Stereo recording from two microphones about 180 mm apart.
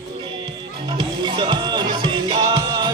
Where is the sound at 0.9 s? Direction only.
25° right (ahead or behind).